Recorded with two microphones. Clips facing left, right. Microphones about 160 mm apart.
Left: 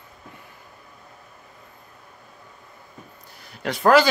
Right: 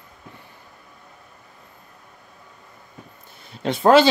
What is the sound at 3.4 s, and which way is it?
Speech, 25° right (ahead or behind).